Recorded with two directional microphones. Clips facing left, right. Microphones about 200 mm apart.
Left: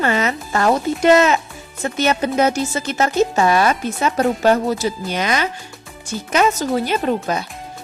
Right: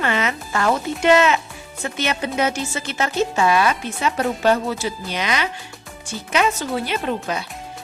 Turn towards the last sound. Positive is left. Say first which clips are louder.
# left 4 dB
turn(degrees=40)  # may be behind; listen again after turning